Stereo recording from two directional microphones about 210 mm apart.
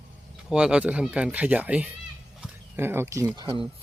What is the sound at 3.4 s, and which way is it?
Speech, 25° right (ahead or behind).